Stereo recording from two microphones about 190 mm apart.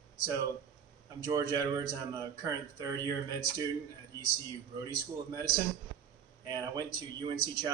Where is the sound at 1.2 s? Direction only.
20° right (ahead or behind).